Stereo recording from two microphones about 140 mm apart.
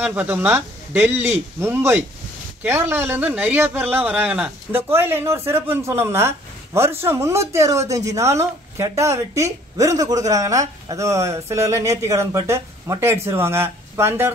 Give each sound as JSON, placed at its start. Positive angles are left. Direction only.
{"t": 0.0, "sound": "a man's voice", "side_deg": -10}